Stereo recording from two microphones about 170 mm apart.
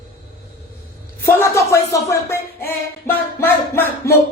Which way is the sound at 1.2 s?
15° left (ahead or behind).